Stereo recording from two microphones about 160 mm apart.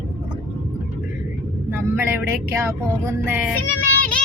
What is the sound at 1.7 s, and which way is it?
Speech, 15° right (ahead or behind).